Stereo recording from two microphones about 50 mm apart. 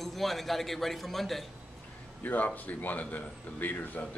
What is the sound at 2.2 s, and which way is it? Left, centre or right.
Speech, left.